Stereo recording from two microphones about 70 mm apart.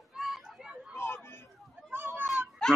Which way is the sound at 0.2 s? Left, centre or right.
Centre.